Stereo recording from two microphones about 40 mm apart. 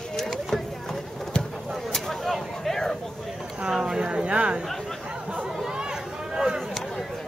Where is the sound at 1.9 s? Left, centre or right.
Centre.